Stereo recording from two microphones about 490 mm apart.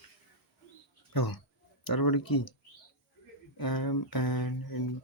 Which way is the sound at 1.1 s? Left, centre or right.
Left.